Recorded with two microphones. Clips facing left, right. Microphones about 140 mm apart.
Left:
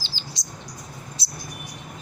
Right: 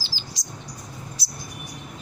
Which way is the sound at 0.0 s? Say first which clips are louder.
Even; 25° left (ahead or behind).